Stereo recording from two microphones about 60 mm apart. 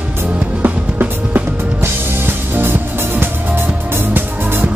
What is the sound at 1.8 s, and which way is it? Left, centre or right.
Music, right.